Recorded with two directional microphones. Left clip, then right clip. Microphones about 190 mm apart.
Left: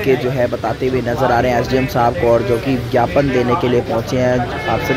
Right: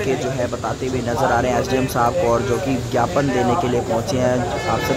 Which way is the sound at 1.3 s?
20° left (ahead or behind).